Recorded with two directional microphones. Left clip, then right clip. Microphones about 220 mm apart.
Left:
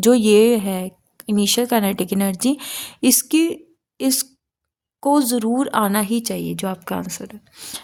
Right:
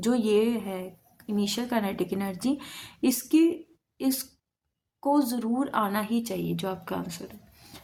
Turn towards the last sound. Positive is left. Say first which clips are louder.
# left 14 dB
turn(degrees=45)  # may be behind; listen again after turning